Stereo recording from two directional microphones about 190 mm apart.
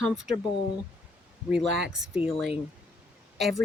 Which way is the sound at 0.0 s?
Centre (ahead or behind).